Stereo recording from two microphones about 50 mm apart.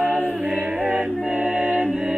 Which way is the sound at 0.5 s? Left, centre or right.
Right.